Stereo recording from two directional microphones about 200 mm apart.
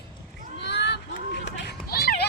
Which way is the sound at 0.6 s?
60° left (ahead or behind).